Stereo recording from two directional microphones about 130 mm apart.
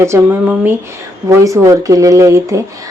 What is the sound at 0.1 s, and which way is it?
Speech, 20° right (ahead or behind).